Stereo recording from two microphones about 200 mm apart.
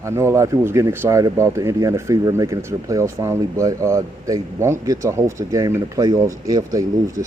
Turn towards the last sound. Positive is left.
turn(degrees=-15)  # may be behind; listen again after turning